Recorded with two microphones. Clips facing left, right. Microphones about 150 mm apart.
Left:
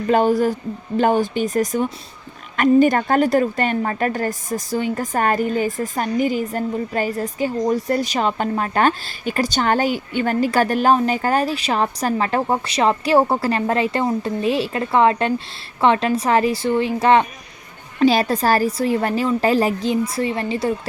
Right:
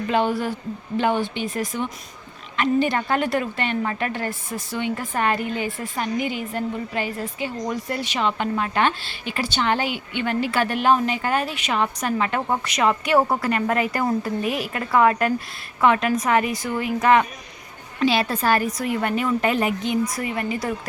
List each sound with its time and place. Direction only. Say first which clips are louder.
0.1 s a woman's voice: left 6 dB; 40° left (ahead or behind)
18.0 s speech: left 5 dB; 40° left (ahead or behind)